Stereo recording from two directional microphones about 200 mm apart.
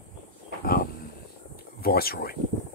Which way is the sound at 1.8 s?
50° left (ahead or behind).